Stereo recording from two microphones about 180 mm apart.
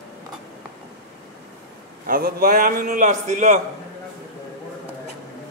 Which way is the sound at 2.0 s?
55° right (ahead or behind).